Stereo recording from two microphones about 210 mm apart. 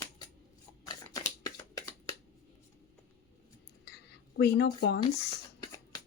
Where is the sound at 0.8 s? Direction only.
20° left (ahead or behind).